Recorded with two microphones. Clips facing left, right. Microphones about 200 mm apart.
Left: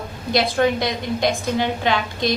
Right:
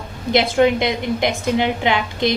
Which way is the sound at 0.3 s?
20° right (ahead or behind).